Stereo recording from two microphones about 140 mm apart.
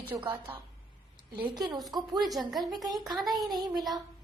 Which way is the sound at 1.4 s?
30° right (ahead or behind).